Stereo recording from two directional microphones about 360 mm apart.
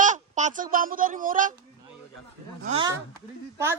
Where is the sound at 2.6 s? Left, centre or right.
Centre.